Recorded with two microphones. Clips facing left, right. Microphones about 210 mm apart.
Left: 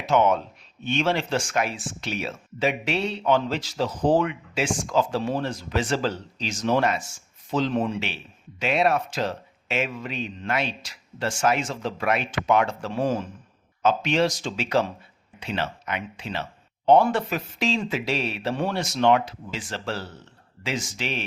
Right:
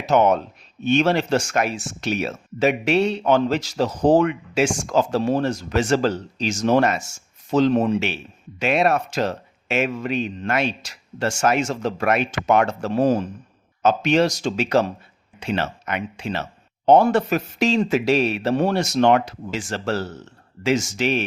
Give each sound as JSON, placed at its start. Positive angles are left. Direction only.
{"t": 0.0, "sound": "speech", "side_deg": -40}
{"t": 9.6, "sound": "speech", "side_deg": -65}
{"t": 9.9, "sound": "a man's voice", "side_deg": -45}
{"t": 20.7, "sound": "speech", "side_deg": -75}